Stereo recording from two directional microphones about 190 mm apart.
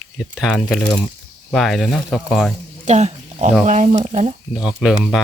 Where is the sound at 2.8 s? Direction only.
35° right (ahead or behind).